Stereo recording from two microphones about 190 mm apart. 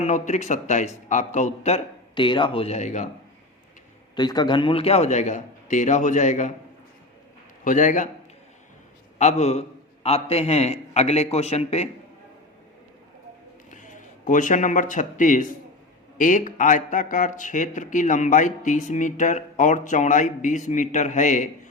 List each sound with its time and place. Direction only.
0.0 s speech: 40° left (ahead or behind)
4.1 s speech: 20° left (ahead or behind); by 6.5 s 40° left (ahead or behind)
7.6 s a man's voice: 40° left (ahead or behind)
9.1 s speech: 35° left (ahead or behind)
13.7 s a man's voice: 40° left (ahead or behind)